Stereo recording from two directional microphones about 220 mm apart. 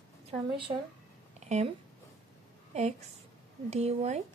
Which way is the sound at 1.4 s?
30° right (ahead or behind).